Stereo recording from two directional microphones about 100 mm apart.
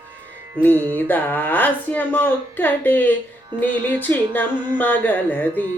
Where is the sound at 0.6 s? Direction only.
20° left (ahead or behind).